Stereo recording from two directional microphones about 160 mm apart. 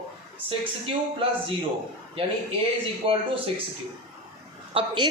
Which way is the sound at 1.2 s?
35° right (ahead or behind).